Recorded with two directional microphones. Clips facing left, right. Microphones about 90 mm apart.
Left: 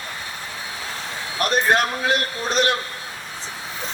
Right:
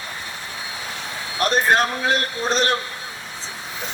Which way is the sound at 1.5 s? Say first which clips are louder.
Right 1 dB; 35° right (ahead or behind).